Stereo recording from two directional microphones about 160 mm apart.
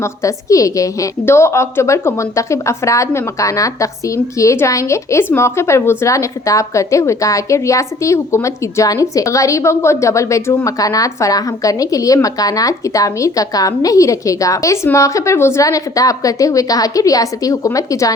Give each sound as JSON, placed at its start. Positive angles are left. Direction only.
{"t": 0.0, "sound": "a woman's voice", "side_deg": 20}